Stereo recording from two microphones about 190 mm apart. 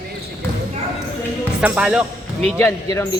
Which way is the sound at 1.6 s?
5° right (ahead or behind).